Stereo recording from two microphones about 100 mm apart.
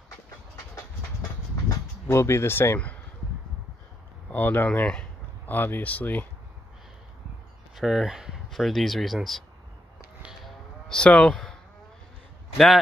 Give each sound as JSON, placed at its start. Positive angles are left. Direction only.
{"t": 1.7, "sound": "speech", "side_deg": 30}
{"t": 4.3, "sound": "speech", "side_deg": 20}
{"t": 7.7, "sound": "speech", "side_deg": -5}
{"t": 10.9, "sound": "speech", "side_deg": 10}